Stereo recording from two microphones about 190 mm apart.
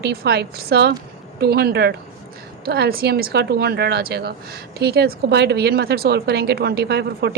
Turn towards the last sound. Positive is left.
turn(degrees=-60)  # may be behind; listen again after turning